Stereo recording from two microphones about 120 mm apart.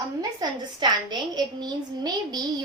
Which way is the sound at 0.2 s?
35° right (ahead or behind).